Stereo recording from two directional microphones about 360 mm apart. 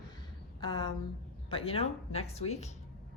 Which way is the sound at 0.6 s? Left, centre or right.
Centre.